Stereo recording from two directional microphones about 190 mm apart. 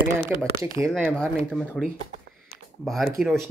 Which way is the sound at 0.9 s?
Centre (ahead or behind).